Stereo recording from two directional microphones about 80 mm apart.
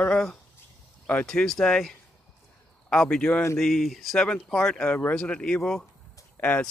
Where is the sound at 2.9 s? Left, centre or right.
Centre.